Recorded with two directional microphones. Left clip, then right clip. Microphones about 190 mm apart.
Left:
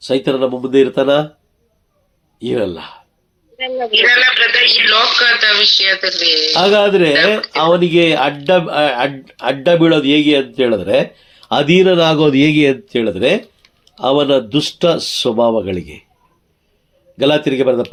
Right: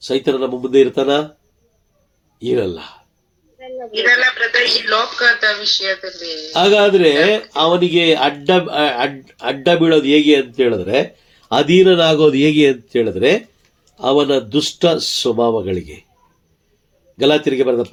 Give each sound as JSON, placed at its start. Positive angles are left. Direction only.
{"t": 0.0, "sound": "speech", "side_deg": 35}
{"t": 2.4, "sound": "speech", "side_deg": 35}
{"t": 3.6, "sound": "a man's voice", "side_deg": 55}
{"t": 6.5, "sound": "speech", "side_deg": 30}
{"t": 17.2, "sound": "speech", "side_deg": 35}